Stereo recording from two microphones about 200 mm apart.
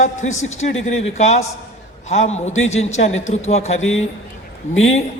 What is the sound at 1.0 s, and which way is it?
A man's voice, 35° left (ahead or behind).